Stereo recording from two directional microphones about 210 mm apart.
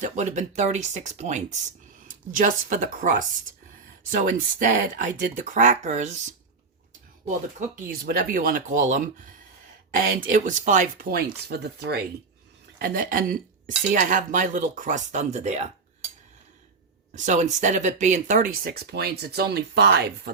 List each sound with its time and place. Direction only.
0.0 s cutlery: 35° right (ahead or behind)
9.9 s speech: 40° right (ahead or behind)
12.8 s cutlery: 40° right (ahead or behind)
17.2 s speech: 35° right (ahead or behind); by 20.3 s 50° right (ahead or behind)